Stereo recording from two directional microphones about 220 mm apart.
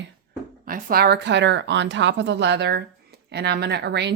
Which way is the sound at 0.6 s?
40° right (ahead or behind).